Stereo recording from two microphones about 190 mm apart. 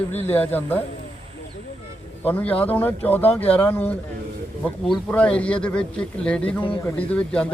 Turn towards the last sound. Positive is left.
turn(degrees=5)  # may be behind; listen again after turning